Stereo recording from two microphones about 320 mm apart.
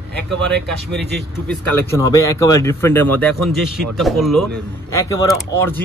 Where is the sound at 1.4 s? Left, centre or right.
Centre.